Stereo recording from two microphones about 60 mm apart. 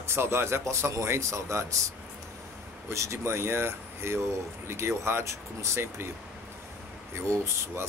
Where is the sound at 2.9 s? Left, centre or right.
Right.